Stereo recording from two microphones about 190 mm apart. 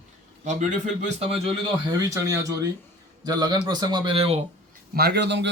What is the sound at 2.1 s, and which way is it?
Speech, 15° right (ahead or behind).